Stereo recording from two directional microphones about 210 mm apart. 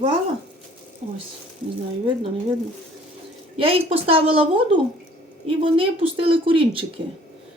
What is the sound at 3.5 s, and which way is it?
Speech, 25° right (ahead or behind).